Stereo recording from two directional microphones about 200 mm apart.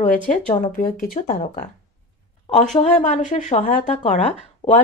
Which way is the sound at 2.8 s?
35° left (ahead or behind).